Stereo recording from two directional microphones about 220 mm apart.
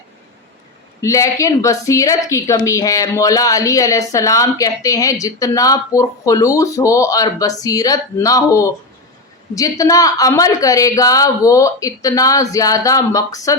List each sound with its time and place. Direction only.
1.0 s speech: 15° left (ahead or behind)